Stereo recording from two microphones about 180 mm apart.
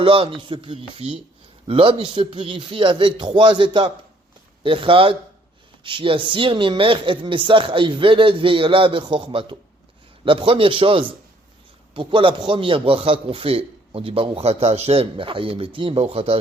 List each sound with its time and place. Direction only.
0.0 s a man's voice: 30° right (ahead or behind)